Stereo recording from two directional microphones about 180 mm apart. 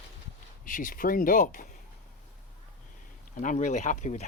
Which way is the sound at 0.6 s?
50° left (ahead or behind).